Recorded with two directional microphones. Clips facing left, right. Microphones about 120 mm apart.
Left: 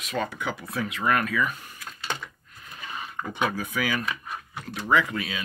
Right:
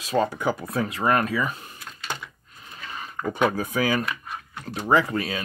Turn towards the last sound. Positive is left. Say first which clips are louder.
# right 3 dB
turn(degrees=-40)  # may be behind; listen again after turning